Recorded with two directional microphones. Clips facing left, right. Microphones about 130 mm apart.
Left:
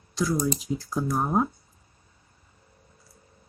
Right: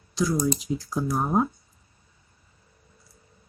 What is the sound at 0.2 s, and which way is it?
Speech, centre (ahead or behind).